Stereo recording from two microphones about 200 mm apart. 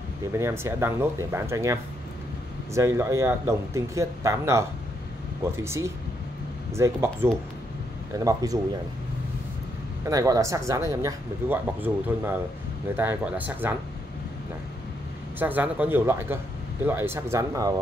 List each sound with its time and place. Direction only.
0.4 s speech: 15° right (ahead or behind)
10.0 s speech: 15° right (ahead or behind)
15.3 s speech: 10° right (ahead or behind)